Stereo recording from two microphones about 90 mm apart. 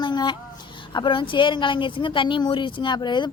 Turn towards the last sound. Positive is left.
turn(degrees=60)  # may be behind; listen again after turning